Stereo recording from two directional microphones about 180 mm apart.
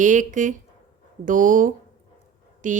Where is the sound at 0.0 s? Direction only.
45° right (ahead or behind).